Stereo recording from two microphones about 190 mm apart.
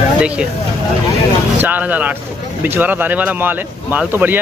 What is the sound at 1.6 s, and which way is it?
Speech, 10° right (ahead or behind).